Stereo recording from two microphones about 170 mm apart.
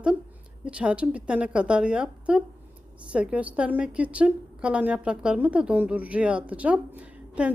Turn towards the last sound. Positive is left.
turn(degrees=-5)  # may be behind; listen again after turning